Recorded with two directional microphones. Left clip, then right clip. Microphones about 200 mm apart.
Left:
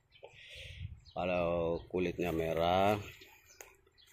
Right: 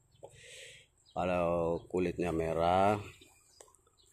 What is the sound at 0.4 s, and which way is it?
Speech, 20° right (ahead or behind).